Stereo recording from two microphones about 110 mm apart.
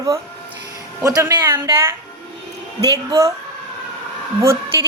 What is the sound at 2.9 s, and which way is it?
Speech, 30° right (ahead or behind).